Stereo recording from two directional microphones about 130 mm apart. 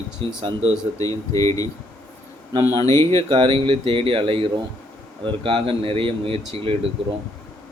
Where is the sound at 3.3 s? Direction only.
40° right (ahead or behind).